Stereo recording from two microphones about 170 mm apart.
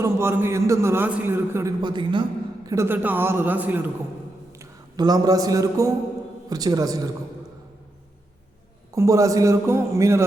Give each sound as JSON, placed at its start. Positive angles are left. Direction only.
{"t": 0.0, "sound": "a man's voice", "side_deg": -15}
{"t": 1.8, "sound": "a man's voice", "side_deg": -30}
{"t": 2.6, "sound": "a man's voice", "side_deg": -15}
{"t": 9.0, "sound": "a man's voice", "side_deg": -20}